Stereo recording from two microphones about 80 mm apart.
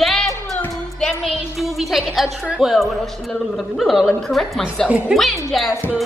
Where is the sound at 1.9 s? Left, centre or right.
Centre.